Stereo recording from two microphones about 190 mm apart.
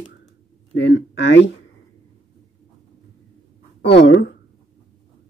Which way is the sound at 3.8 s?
65° left (ahead or behind).